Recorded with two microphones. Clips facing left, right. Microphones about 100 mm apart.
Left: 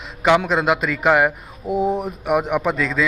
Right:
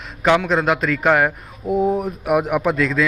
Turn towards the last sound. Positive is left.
turn(degrees=0)  # may be behind; listen again after turning